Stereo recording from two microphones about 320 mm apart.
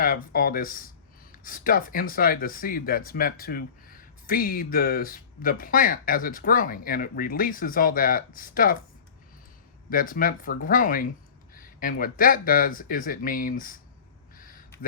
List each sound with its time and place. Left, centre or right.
0.0 s speech: left
9.9 s speech: left
14.3 s a sound: left